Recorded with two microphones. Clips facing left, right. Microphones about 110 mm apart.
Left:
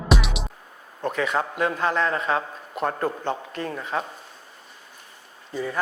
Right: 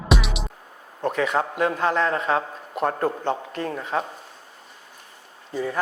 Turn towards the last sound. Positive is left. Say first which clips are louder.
# right 2 dB
turn(degrees=-50)  # may be behind; listen again after turning